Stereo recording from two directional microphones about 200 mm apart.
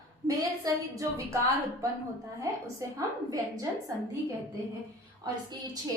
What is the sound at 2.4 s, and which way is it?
A woman's voice, 15° right (ahead or behind).